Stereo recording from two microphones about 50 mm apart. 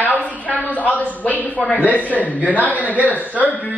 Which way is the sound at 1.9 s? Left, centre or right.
Left.